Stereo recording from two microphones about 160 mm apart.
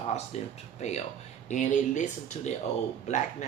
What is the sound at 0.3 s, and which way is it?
Speech, 45° left (ahead or behind).